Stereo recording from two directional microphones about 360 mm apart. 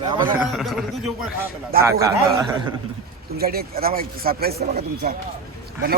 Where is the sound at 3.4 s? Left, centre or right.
Right.